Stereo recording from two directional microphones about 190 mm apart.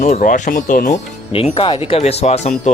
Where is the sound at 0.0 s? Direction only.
40° left (ahead or behind).